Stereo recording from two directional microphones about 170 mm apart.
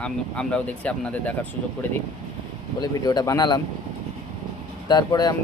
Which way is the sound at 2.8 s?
20° left (ahead or behind).